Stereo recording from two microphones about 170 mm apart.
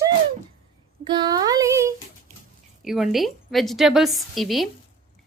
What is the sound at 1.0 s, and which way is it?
Child singing, 25° right (ahead or behind).